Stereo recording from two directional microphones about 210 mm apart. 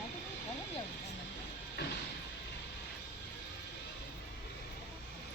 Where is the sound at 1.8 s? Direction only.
50° left (ahead or behind).